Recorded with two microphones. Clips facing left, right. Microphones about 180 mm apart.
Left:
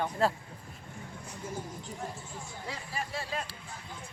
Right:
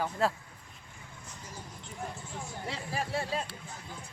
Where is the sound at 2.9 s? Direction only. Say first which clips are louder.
Right 5 dB; 50° right (ahead or behind).